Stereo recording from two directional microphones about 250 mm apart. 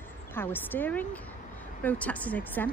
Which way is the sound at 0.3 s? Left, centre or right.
Centre.